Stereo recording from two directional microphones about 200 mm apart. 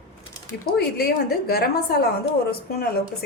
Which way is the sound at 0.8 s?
50° left (ahead or behind).